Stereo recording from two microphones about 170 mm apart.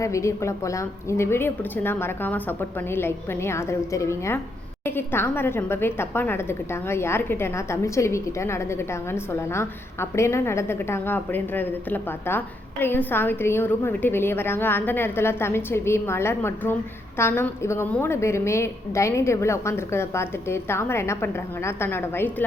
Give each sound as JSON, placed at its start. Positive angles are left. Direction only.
{"t": 0.0, "sound": "a woman's voice", "side_deg": 15}